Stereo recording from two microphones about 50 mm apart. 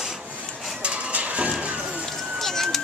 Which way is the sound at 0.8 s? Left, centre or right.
Right.